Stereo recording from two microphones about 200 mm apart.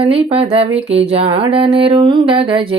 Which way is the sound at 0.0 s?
30° right (ahead or behind).